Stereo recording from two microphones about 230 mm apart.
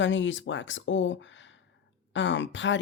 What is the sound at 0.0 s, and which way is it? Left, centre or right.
Speech, left.